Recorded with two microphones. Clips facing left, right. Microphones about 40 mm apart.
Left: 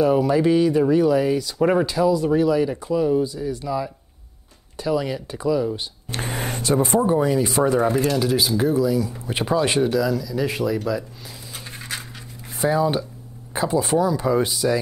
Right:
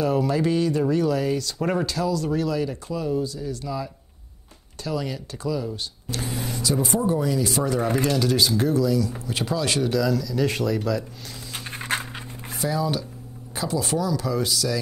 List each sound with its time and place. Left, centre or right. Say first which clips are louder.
0.0 s speech: left 5 dB; centre
6.0 s a sound: left 3 dB; left
7.0 s speech: left 4 dB; left
8.2 s speech: left 1 dB; centre
9.8 s speech: left 2 dB; centre
11.5 s a sound: right 5 dB; right
12.5 s speech: left 5 dB; left